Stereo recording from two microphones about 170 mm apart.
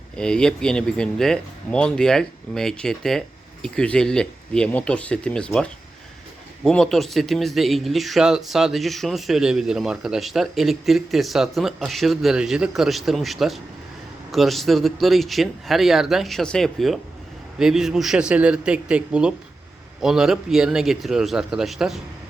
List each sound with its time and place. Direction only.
0.2 s speech: 5° left (ahead or behind)